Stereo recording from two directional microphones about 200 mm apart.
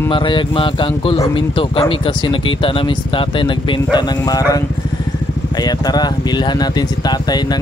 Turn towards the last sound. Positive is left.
turn(degrees=20)  # may be behind; listen again after turning